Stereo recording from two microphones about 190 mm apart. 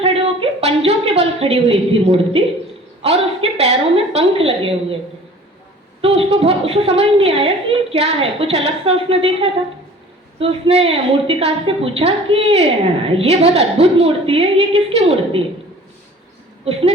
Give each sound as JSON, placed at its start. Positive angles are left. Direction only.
{"t": 0.0, "sound": "a sound", "side_deg": -30}
{"t": 3.0, "sound": "a woman's voice", "side_deg": -30}
{"t": 6.0, "sound": "a woman's voice", "side_deg": -30}